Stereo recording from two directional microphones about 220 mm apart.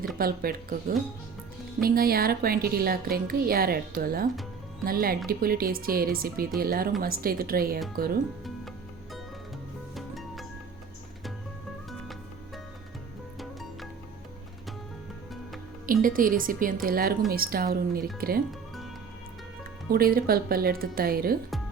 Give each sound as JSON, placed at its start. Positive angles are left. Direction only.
{"t": 0.2, "sound": "a woman's voice", "side_deg": -40}
{"t": 9.9, "sound": "music", "side_deg": 0}
{"t": 15.9, "sound": "a woman's voice", "side_deg": -40}
{"t": 19.9, "sound": "a woman's voice", "side_deg": -45}